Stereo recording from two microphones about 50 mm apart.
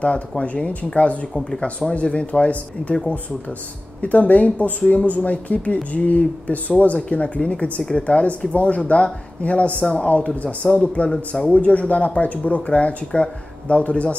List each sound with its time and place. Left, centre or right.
0.4 s speech: left
4.0 s speech: left